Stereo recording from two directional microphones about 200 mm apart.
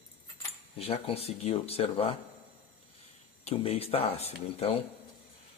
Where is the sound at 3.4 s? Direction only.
30° left (ahead or behind).